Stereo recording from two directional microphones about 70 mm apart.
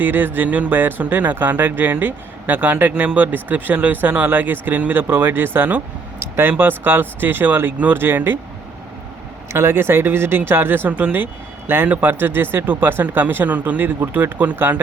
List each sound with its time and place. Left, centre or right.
0.0 s speech: right
2.9 s speech: centre
3.2 s speech: right
9.5 s speech: right